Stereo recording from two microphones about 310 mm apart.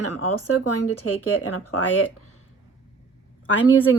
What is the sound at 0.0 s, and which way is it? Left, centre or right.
Speech, left.